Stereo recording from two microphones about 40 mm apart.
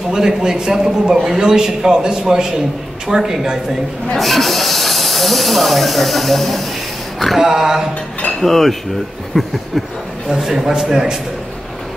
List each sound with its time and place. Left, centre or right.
0.1 s speech: centre
1.1 s a sound: centre
1.4 s speech: centre
4.2 s speech: centre
7.3 s speech: centre
8.4 s a sound: centre
10.3 s speech: centre